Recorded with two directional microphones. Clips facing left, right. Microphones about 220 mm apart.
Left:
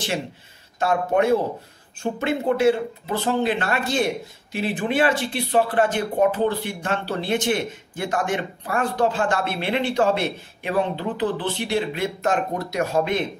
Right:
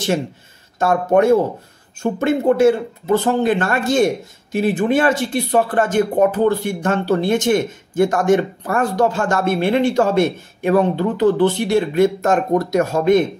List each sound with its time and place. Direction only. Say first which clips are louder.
0.7 s speech: right 5 dB; 45° right (ahead or behind)